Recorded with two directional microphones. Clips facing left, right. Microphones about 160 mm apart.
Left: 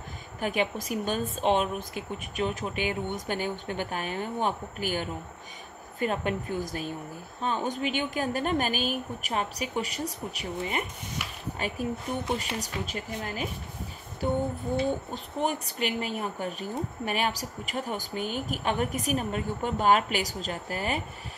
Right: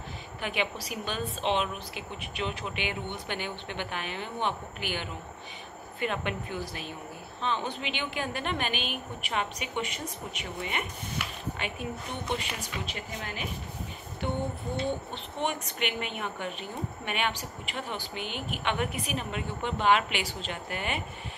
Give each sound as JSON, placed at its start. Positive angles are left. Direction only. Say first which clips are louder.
{"t": 0.4, "sound": "a woman's voice", "louder": "left 4 dB", "side_deg": 45}